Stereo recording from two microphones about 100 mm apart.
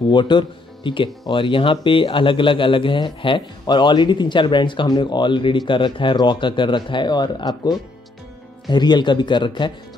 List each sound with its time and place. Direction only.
0.1 s speech: 50° left (ahead or behind)